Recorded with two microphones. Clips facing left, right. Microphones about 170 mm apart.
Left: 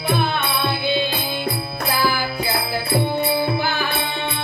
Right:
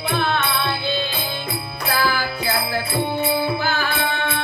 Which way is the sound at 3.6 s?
15° left (ahead or behind).